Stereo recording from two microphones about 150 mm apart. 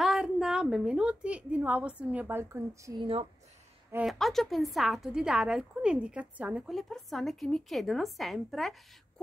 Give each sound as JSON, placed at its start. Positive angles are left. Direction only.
{"t": 0.0, "sound": "a woman's voice", "side_deg": -5}
{"t": 3.0, "sound": "speech", "side_deg": -40}
{"t": 3.9, "sound": "a woman's voice", "side_deg": 0}